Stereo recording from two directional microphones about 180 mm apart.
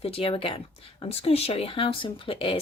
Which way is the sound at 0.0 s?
30° left (ahead or behind).